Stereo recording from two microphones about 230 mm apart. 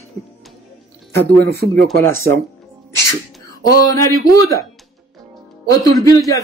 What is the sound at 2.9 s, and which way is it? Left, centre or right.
Sneeze, centre.